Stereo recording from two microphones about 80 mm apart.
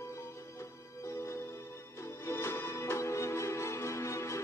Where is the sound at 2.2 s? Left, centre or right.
Left.